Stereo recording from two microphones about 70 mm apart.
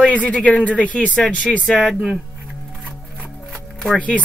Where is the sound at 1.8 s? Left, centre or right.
Centre.